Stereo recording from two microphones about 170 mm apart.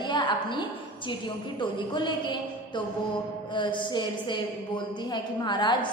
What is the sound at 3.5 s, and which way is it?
A woman's voice, 30° left (ahead or behind).